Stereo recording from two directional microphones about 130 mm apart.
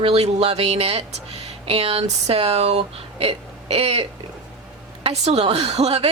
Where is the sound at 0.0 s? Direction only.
50° right (ahead or behind).